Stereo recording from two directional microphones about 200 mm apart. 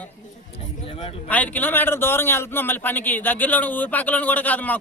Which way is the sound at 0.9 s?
25° left (ahead or behind).